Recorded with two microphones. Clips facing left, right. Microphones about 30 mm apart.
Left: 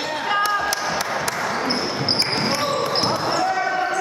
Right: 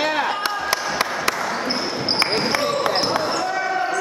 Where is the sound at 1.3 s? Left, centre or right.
Centre.